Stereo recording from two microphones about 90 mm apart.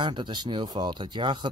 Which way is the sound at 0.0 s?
60° right (ahead or behind).